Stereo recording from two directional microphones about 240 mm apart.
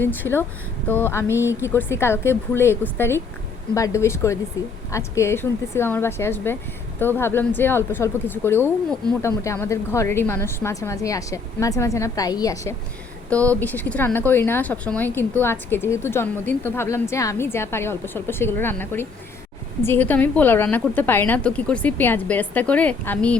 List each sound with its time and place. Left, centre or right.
0.0 s speech: centre